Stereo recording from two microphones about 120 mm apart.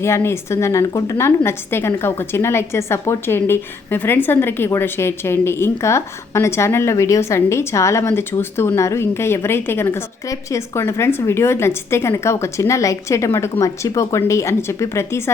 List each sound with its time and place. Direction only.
0.0 s a woman's voice: 20° left (ahead or behind)